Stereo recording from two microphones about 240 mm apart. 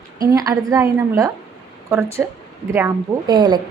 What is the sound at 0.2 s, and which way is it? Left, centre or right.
A woman's voice, centre.